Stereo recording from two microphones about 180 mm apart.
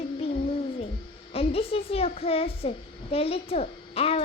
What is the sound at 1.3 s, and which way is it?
A child's voice, 35° left (ahead or behind).